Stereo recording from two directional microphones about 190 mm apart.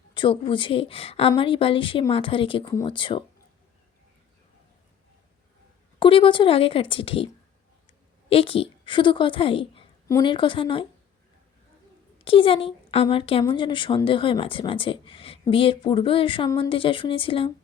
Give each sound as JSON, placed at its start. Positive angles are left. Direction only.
{"t": 0.1, "sound": "speech", "side_deg": 25}
{"t": 6.0, "sound": "a woman's voice", "side_deg": 25}
{"t": 12.2, "sound": "speech", "side_deg": 30}